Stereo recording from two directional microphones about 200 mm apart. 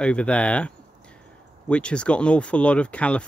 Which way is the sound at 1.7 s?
5° left (ahead or behind).